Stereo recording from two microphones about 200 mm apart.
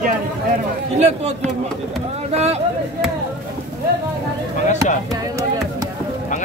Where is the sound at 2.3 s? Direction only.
30° right (ahead or behind).